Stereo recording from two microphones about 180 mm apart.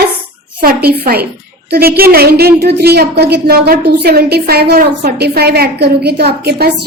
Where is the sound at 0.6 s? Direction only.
55° right (ahead or behind).